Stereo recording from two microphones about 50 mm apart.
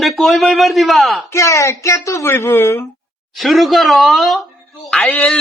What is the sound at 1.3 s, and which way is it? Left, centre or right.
Speech, left.